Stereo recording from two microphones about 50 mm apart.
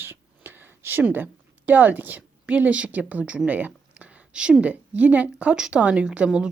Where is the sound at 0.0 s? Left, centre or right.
Right.